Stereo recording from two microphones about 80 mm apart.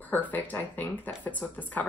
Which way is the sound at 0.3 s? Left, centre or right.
Left.